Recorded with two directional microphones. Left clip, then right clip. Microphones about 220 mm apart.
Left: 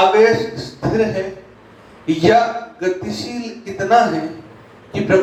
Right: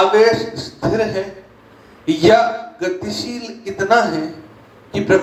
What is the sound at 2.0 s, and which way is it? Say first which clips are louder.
A man's voice: right 1 dB; 40° right (ahead or behind).